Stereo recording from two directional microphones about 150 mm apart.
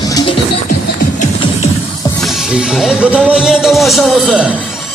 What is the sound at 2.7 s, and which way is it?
A man's voice, 5° right (ahead or behind).